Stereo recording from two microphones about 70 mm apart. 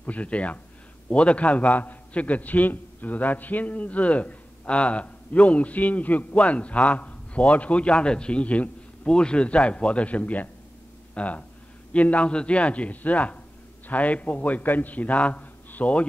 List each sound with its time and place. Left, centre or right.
0.0 s a man's voice: centre